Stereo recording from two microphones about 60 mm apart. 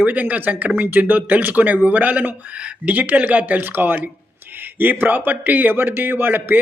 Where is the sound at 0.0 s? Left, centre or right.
Right.